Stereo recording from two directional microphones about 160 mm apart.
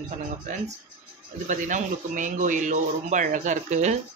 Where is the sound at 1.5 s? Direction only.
50° right (ahead or behind).